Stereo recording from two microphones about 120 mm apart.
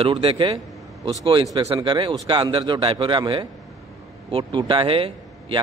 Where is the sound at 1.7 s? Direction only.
45° right (ahead or behind).